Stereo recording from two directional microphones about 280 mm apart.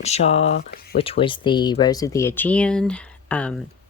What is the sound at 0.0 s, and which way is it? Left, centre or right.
Speech, left.